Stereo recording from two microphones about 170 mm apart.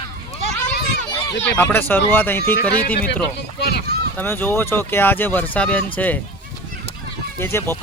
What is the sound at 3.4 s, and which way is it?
Speech, 80° left.